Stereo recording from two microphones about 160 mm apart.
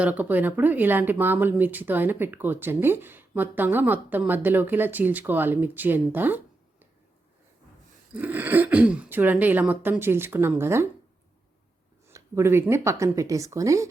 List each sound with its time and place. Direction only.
0.0 s speech: 10° right (ahead or behind)
8.1 s speech: 10° right (ahead or behind)
12.0 s speech: 15° right (ahead or behind)